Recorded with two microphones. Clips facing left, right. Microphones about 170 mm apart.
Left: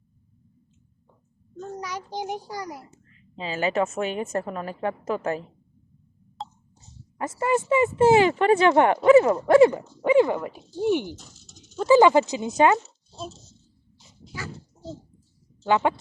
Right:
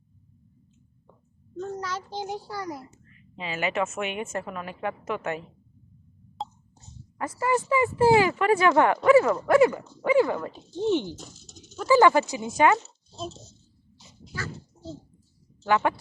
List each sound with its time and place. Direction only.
1.5 s a child's voice: 15° left (ahead or behind)
3.1 s a woman's voice: 30° left (ahead or behind)
6.4 s a sound: centre (ahead or behind)
7.2 s speech: 25° left (ahead or behind)
14.3 s dog: 15° left (ahead or behind)
15.6 s speech: 20° left (ahead or behind)